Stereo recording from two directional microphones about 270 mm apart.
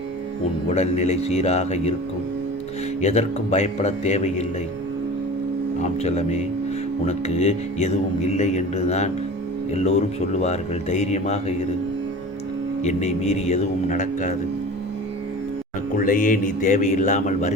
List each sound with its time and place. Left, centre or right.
0.7 s speech: left
3.0 s speech: left
5.8 s speech: left
12.8 s speech: left
16.0 s speech: left